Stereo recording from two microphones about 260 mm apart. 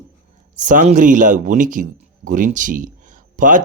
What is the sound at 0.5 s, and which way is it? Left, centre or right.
A man's voice, right.